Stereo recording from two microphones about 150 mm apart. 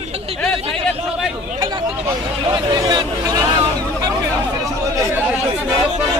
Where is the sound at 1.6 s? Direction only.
25° right (ahead or behind).